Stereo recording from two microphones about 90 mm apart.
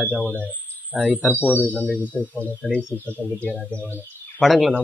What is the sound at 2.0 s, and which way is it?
Speech, 20° left (ahead or behind).